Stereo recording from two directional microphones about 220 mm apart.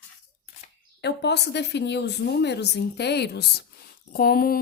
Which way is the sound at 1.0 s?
50° left (ahead or behind).